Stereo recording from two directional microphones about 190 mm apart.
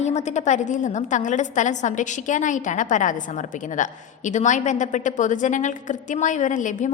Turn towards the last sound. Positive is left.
turn(degrees=40)  # may be behind; listen again after turning